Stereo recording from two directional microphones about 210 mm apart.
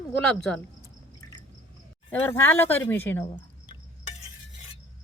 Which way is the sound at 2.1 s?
10° left (ahead or behind).